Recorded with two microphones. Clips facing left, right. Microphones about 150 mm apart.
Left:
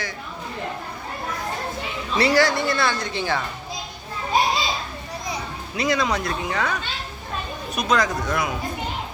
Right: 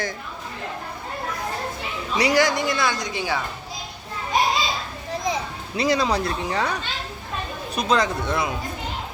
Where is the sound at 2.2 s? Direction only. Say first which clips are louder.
Left 1 dB; 15° right (ahead or behind).